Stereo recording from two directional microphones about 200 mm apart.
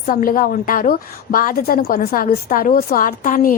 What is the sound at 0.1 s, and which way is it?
A woman's voice, 45° left (ahead or behind).